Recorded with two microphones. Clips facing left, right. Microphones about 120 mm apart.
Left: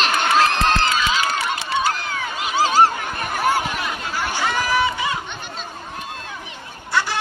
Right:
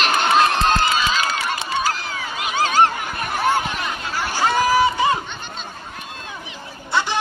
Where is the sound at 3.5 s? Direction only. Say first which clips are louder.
Even; 5° left (ahead or behind).